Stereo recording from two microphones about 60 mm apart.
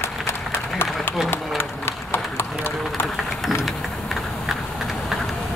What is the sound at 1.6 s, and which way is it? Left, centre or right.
Run, left.